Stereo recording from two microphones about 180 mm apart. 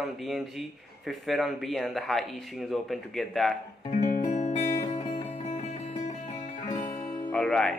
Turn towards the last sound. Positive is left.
turn(degrees=5)  # may be behind; listen again after turning